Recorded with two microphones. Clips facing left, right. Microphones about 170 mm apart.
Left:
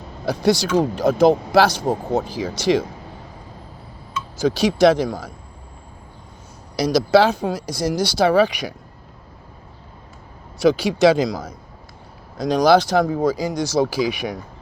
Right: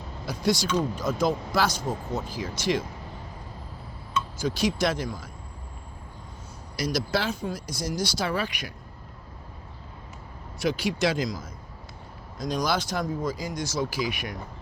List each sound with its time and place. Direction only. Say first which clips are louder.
0.3 s speech: left 8 dB; 70° left (ahead or behind)
4.4 s speech: left 10 dB; 75° left (ahead or behind)
6.7 s speech: left 12 dB; 80° left
10.6 s speech: left 10 dB; 85° left